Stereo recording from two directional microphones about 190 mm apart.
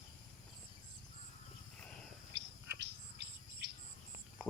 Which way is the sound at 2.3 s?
65° right (ahead or behind).